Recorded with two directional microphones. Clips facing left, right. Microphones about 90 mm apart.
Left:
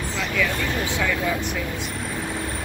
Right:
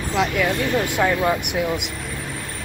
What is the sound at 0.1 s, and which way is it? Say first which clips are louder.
Speech: right 5 dB; 60° right (ahead or behind).